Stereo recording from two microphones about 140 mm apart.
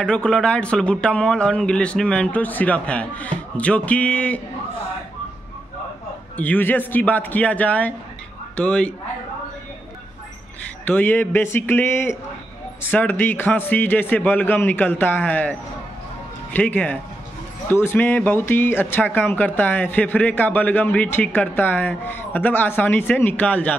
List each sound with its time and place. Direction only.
0.0 s speech: 5° left (ahead or behind)
6.3 s speech: 10° left (ahead or behind)
10.9 s speech: 15° left (ahead or behind)
16.5 s speech: 10° left (ahead or behind)